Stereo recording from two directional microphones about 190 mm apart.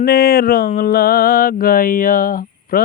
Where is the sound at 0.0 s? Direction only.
55° left (ahead or behind).